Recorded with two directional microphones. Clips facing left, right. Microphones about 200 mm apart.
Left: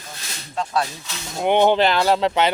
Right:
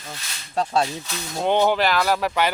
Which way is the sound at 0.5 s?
35° right (ahead or behind).